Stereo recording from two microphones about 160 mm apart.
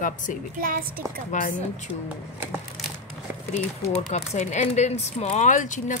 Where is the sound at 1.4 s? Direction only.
50° left (ahead or behind).